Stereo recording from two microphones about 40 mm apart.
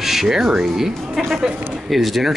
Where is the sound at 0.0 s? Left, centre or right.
Centre.